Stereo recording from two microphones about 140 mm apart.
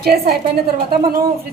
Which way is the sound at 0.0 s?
90° right.